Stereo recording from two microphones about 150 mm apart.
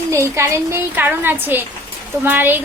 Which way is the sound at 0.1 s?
20° right (ahead or behind).